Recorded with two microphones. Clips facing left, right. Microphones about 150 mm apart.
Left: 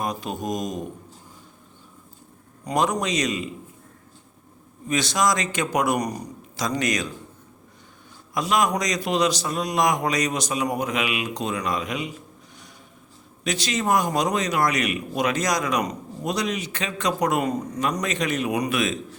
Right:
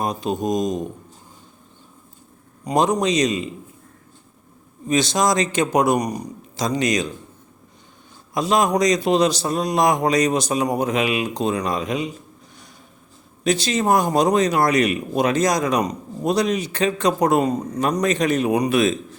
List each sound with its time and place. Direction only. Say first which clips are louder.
0.0 s a man's voice: right 5 dB; 25° right (ahead or behind)
2.6 s a man's voice: right 5 dB; 25° right (ahead or behind)
4.9 s a man's voice: right 4 dB; 25° right (ahead or behind)
8.3 s a man's voice: right 4 dB; 25° right (ahead or behind)
13.4 s speech: right 6 dB; 30° right (ahead or behind)